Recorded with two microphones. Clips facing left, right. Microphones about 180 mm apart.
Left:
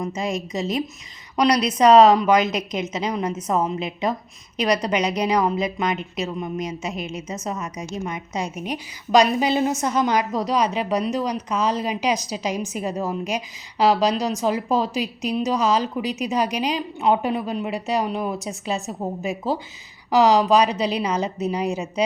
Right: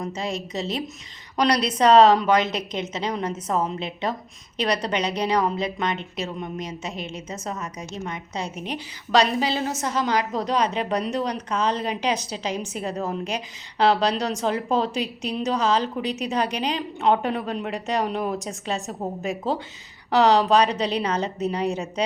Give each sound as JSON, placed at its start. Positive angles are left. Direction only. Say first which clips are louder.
{"t": 0.0, "sound": "a woman's voice", "louder": "left 3 dB", "side_deg": 10}
{"t": 1.8, "sound": "a woman's voice", "louder": "left 2 dB", "side_deg": 10}
{"t": 2.4, "sound": "a woman's voice", "louder": "left 3 dB", "side_deg": -30}
{"t": 2.9, "sound": "a woman's voice", "louder": "left 2 dB", "side_deg": 10}
{"t": 4.9, "sound": "a woman's voice", "louder": "left 3 dB", "side_deg": 10}